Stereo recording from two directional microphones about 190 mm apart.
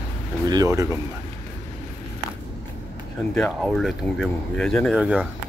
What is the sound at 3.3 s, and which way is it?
Speech, 5° left (ahead or behind).